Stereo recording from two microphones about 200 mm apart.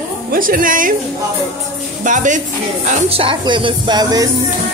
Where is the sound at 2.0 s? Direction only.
40° right (ahead or behind).